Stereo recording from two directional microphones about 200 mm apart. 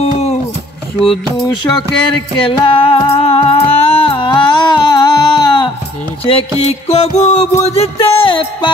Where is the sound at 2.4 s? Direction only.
25° left (ahead or behind).